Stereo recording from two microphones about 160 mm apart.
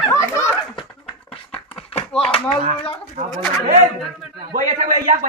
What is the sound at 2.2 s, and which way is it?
Speech, 35° left (ahead or behind).